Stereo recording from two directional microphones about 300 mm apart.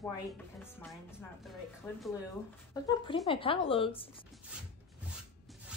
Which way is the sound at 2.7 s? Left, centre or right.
Centre.